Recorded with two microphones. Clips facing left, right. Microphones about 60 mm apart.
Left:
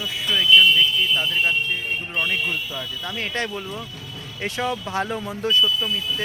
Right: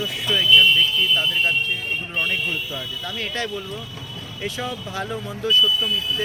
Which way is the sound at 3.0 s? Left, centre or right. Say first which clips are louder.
Left 1 dB; left.